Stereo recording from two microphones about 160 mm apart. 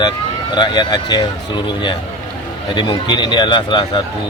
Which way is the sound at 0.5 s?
25° left (ahead or behind).